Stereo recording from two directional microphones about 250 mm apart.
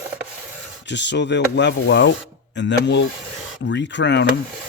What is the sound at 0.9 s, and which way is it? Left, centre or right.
Speech, left.